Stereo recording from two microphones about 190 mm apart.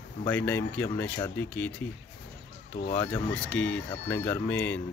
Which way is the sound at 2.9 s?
5° left (ahead or behind).